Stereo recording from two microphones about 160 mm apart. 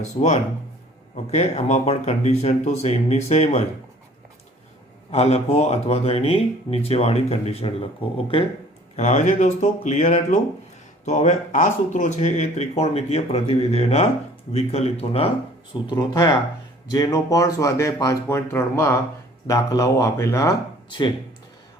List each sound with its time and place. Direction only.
0.0 s speech: 45° left (ahead or behind)
5.1 s speech: 40° left (ahead or behind)
9.0 s speech: 45° left (ahead or behind)
16.0 s speech: 20° left (ahead or behind)